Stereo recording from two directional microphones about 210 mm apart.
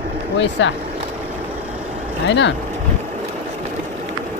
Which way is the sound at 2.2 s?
60° left (ahead or behind).